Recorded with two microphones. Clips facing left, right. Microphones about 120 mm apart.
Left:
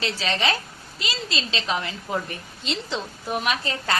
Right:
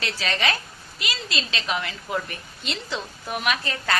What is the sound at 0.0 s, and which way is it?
A woman's voice, 25° left (ahead or behind).